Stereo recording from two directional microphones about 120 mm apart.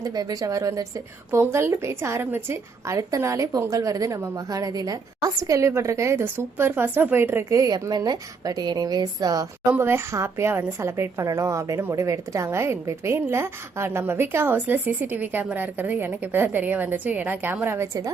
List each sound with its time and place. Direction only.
0.0 s a woman's voice: 30° right (ahead or behind)
7.6 s a woman's voice: 35° right (ahead or behind)
9.6 s a woman's voice: 20° right (ahead or behind)